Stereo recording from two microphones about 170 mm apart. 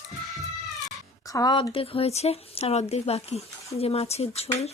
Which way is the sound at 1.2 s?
20° left (ahead or behind).